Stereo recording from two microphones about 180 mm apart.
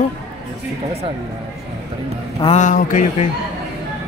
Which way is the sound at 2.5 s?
45° left (ahead or behind).